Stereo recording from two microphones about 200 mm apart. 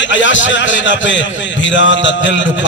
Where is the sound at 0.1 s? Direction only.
70° left (ahead or behind).